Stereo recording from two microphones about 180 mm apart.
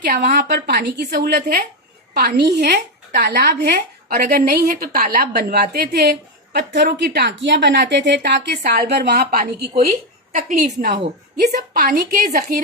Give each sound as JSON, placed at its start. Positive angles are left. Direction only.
{"t": 0.0, "sound": "a woman's voice", "side_deg": -55}